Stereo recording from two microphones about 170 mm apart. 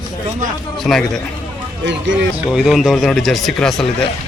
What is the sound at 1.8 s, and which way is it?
Speech, 90° right.